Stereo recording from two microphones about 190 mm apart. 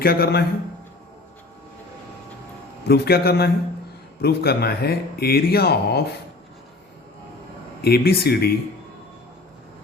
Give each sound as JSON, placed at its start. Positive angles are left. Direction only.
{"t": 0.0, "sound": "a man's voice", "side_deg": 55}
{"t": 2.8, "sound": "speech", "side_deg": 60}
{"t": 7.8, "sound": "speech", "side_deg": 55}